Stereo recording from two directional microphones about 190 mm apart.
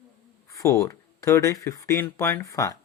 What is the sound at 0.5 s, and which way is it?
Speech, 15° left (ahead or behind).